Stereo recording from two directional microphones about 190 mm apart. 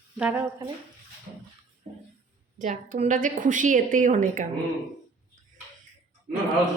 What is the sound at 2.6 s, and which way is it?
A woman's voice, 40° right (ahead or behind).